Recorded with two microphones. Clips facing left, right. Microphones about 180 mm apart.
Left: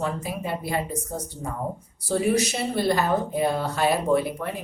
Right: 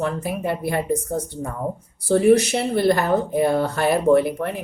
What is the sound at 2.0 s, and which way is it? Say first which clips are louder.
Speech: right 7 dB; 60° right (ahead or behind).